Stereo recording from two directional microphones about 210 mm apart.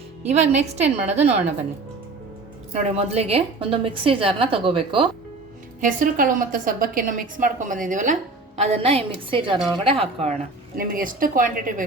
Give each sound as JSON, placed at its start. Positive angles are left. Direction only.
{"t": 0.3, "sound": "a woman's voice", "side_deg": -30}
{"t": 2.7, "sound": "a woman's voice", "side_deg": -30}
{"t": 5.8, "sound": "a woman's voice", "side_deg": -40}
{"t": 10.8, "sound": "a woman's voice", "side_deg": -40}